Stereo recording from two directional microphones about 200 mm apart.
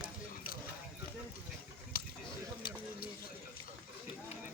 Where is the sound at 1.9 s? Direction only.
45° left (ahead or behind).